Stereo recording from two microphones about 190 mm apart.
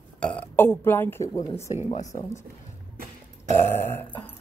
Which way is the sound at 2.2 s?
15° left (ahead or behind).